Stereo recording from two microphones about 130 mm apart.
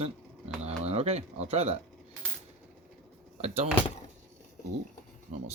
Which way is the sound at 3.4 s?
55° right (ahead or behind).